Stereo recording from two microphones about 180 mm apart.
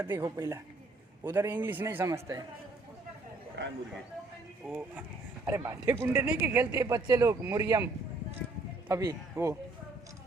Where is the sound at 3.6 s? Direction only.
75° right (ahead or behind).